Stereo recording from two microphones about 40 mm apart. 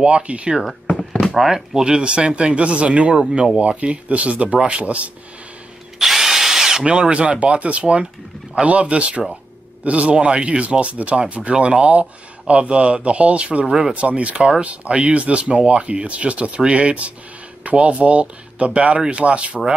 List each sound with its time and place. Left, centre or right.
0.0 s speech: right
0.8 s a sound: left
1.2 s speech: centre
1.9 s speech: right
5.9 s drill: centre
6.9 s speech: right
13.7 s speech: centre
13.9 s speech: right